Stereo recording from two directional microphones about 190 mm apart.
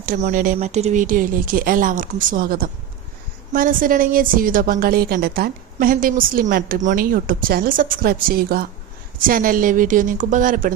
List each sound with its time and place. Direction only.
0.0 s a woman's voice: 40° right (ahead or behind)